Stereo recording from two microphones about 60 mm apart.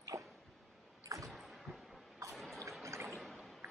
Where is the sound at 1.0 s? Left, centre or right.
Right.